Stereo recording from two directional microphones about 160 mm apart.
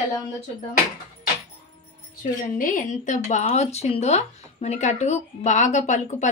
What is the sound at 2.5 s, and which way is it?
Speech, 55° left (ahead or behind).